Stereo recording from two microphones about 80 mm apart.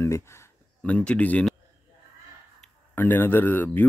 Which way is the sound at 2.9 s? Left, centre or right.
Left.